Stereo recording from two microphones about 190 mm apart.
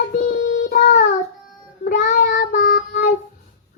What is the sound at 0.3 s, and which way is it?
Child singing, 70° left (ahead or behind).